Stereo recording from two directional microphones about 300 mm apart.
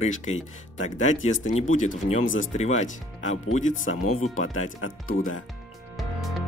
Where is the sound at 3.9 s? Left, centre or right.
Left.